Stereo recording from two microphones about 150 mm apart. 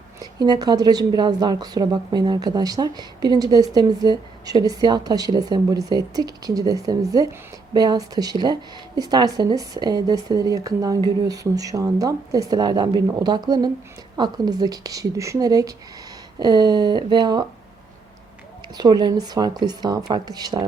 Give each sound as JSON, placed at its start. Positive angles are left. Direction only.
{"t": 0.2, "sound": "a woman's voice", "side_deg": -25}
{"t": 18.7, "sound": "a woman's voice", "side_deg": -25}